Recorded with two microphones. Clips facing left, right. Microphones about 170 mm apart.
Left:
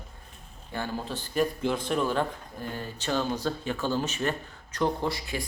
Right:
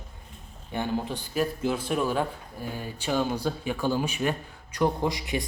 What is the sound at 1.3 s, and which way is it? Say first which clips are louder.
A man's voice: even; 5° right (ahead or behind).